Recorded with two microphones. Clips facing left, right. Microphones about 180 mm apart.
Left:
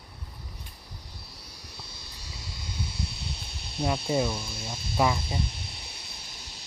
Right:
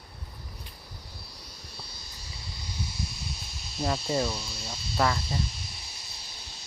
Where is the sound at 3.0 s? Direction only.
65° left (ahead or behind).